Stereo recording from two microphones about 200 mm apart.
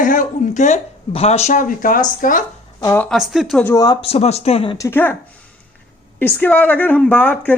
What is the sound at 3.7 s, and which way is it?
Speech, 20° left (ahead or behind).